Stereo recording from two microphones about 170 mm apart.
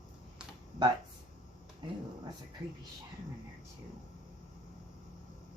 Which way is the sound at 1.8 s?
25° right (ahead or behind).